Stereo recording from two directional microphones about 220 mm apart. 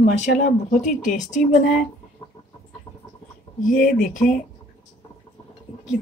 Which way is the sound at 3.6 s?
40° left (ahead or behind).